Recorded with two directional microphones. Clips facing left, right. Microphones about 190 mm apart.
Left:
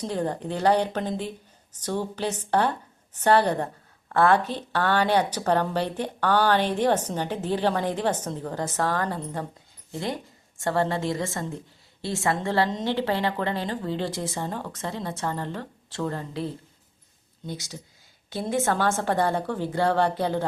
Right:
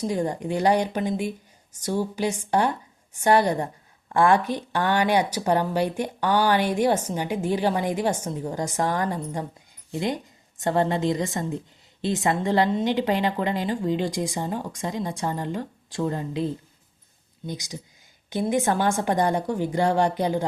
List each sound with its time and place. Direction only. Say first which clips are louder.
0.0 s a woman's voice: right 2 dB; 10° right (ahead or behind)